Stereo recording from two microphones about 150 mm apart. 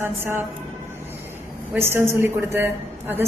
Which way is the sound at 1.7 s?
15° right (ahead or behind).